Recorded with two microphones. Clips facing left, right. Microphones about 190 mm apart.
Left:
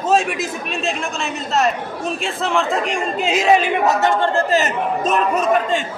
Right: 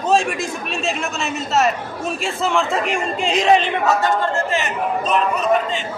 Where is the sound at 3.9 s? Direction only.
20° left (ahead or behind).